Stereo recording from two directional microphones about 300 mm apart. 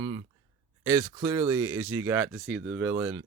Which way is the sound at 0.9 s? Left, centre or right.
Centre.